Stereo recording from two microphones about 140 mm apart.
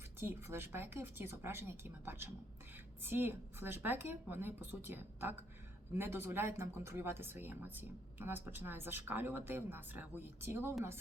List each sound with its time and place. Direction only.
0.2 s speech: 15° right (ahead or behind)